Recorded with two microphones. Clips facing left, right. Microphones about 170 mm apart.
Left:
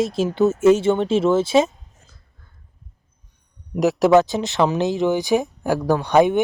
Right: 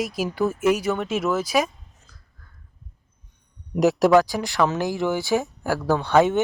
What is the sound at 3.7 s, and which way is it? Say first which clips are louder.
Speech: left 1 dB; centre (ahead or behind).